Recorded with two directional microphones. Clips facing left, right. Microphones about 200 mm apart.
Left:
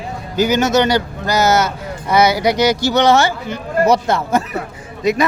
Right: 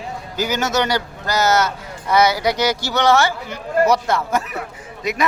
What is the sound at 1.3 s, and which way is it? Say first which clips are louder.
Speech: left 3 dB; 10° left (ahead or behind).